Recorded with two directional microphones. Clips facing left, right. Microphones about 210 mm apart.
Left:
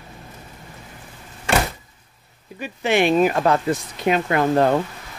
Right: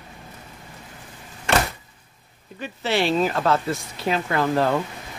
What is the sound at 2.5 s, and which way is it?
Speech, 15° left (ahead or behind).